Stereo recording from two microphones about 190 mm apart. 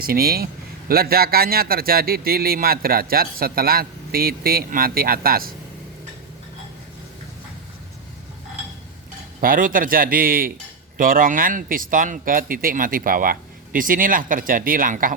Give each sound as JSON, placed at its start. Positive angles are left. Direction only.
{"t": 0.0, "sound": "a man's voice", "side_deg": -50}
{"t": 9.4, "sound": "a man's voice", "side_deg": -45}